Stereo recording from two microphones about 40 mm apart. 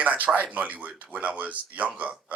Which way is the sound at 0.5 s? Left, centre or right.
Right.